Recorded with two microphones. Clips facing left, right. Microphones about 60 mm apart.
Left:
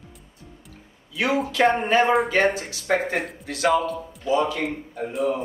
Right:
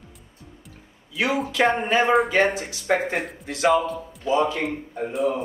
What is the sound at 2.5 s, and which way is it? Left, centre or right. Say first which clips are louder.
Speech: even; centre.